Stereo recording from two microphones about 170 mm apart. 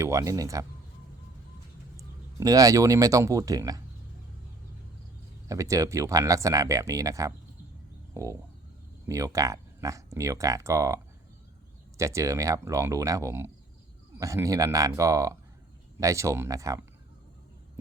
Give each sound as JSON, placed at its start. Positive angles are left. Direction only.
{"t": 0.0, "sound": "speech", "side_deg": -20}
{"t": 2.0, "sound": "speech", "side_deg": -20}
{"t": 5.5, "sound": "speech", "side_deg": -20}
{"t": 8.1, "sound": "a sound", "side_deg": -20}
{"t": 9.0, "sound": "speech", "side_deg": -20}